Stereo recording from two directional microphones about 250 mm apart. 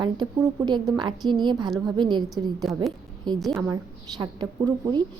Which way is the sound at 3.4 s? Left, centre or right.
Centre.